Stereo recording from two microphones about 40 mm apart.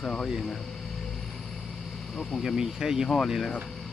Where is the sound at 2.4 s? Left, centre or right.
Centre.